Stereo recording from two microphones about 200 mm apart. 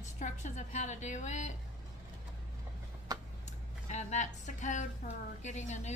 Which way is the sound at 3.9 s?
35° left (ahead or behind).